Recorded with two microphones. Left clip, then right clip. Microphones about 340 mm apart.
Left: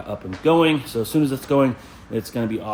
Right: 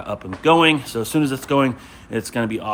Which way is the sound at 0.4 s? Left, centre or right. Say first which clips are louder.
Right 2 dB; centre.